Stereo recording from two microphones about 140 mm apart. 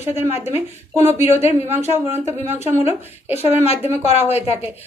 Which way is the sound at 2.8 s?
50° left (ahead or behind).